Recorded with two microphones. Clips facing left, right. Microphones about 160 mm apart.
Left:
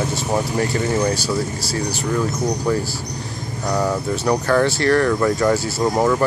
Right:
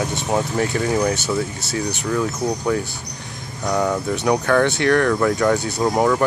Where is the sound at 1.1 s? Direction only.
20° right (ahead or behind).